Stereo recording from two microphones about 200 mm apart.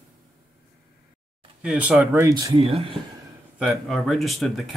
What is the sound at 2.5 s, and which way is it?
Speech, 30° right (ahead or behind).